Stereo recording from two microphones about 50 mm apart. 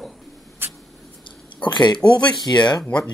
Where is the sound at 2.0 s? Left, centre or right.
Centre.